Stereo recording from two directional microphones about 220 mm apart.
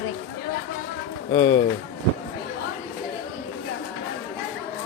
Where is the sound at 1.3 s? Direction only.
15° left (ahead or behind).